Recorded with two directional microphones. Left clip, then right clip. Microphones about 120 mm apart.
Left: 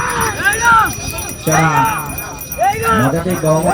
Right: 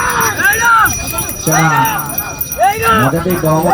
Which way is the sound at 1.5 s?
45° left (ahead or behind).